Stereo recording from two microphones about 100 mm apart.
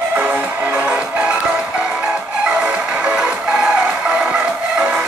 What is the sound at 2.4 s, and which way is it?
Music, 10° right (ahead or behind).